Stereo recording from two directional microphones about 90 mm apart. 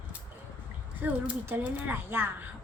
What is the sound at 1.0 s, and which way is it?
Speech, 20° right (ahead or behind).